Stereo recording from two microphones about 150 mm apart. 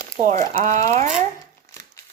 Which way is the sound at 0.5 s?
55° right (ahead or behind).